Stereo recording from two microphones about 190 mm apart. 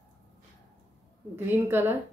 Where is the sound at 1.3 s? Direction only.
10° right (ahead or behind).